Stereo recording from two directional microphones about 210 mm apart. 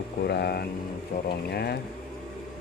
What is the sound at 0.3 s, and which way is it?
Speech, 50° left (ahead or behind).